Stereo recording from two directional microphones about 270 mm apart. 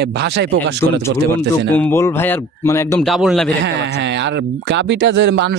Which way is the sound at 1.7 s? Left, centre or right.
Centre.